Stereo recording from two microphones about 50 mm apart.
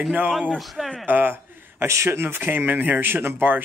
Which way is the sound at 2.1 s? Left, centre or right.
Right.